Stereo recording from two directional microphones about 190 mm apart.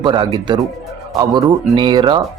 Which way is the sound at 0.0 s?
25° right (ahead or behind).